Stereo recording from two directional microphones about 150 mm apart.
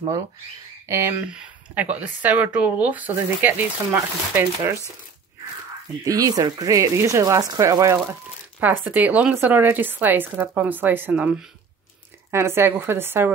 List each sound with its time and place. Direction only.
0.8 s speech: 20° right (ahead or behind)
1.3 s speech: 5° right (ahead or behind)
6.0 s speech: 25° right (ahead or behind)